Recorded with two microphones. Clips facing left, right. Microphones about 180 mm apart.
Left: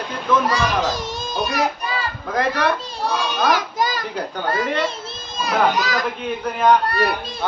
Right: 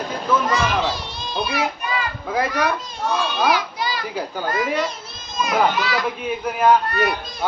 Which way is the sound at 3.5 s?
45° left (ahead or behind).